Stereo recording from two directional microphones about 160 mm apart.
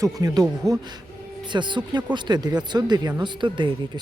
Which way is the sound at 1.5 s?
30° right (ahead or behind).